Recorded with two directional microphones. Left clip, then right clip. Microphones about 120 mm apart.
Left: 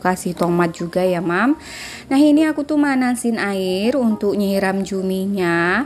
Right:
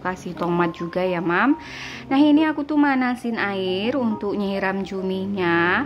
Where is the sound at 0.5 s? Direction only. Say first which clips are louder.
Left 3 dB; 35° left (ahead or behind).